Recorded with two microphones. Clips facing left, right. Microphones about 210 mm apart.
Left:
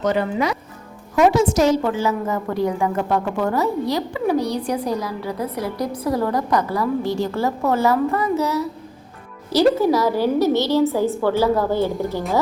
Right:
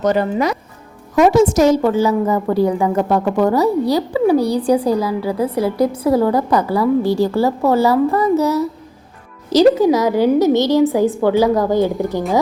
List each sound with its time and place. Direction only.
0.0 s a woman's voice: 40° right (ahead or behind)
9.5 s a woman's voice: 15° right (ahead or behind)